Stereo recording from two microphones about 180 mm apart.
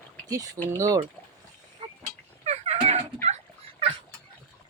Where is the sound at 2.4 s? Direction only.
35° right (ahead or behind).